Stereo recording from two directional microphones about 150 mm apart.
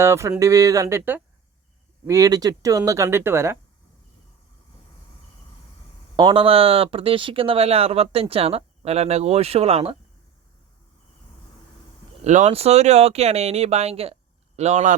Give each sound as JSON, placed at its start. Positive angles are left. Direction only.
{"t": 0.0, "sound": "speech", "side_deg": -20}
{"t": 6.1, "sound": "speech", "side_deg": -35}
{"t": 12.2, "sound": "speech", "side_deg": -50}